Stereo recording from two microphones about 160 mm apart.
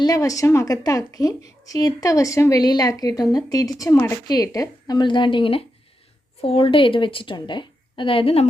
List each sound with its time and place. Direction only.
0.0 s a woman's voice: 20° left (ahead or behind)